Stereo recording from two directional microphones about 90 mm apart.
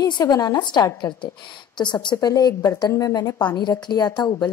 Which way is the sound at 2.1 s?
45° left (ahead or behind).